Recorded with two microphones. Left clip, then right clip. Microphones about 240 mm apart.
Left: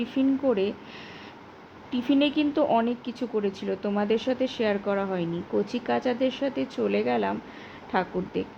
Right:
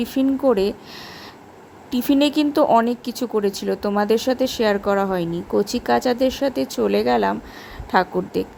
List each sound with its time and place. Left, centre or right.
0.0 s speech: right
2.0 s speech: right
3.0 s speech: right
3.3 s speech: right